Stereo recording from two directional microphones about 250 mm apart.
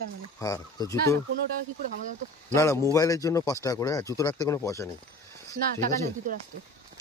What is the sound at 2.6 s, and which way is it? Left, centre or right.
Speech, centre.